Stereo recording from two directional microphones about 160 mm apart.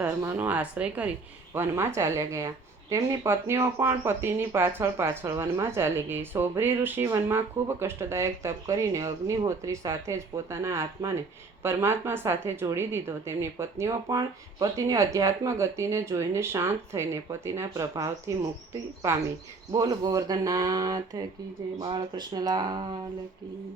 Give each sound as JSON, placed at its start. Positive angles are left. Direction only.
{"t": 0.0, "sound": "speech", "side_deg": -10}